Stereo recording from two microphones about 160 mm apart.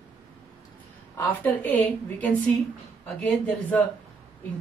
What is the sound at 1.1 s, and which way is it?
Speech, 10° left (ahead or behind).